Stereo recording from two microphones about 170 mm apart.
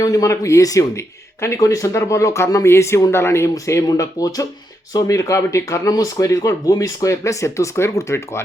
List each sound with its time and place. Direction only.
0.0 s speech: 20° left (ahead or behind)